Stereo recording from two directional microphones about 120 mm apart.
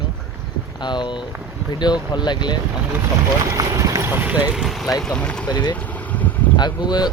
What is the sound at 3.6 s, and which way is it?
Speech, 30° right (ahead or behind).